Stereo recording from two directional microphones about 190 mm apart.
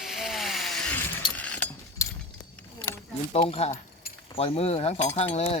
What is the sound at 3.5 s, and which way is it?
Speech, 30° left (ahead or behind).